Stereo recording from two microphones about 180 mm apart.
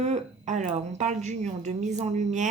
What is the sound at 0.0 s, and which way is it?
A woman's voice, 40° right (ahead or behind).